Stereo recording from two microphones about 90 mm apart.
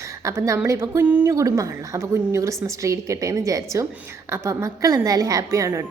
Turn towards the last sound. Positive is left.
turn(degrees=-35)  # may be behind; listen again after turning